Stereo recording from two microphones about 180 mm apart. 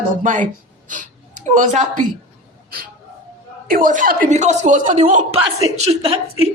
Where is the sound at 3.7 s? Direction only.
50° right (ahead or behind).